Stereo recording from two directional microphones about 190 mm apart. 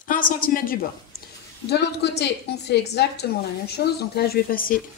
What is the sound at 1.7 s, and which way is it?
A woman's voice, 60° left (ahead or behind).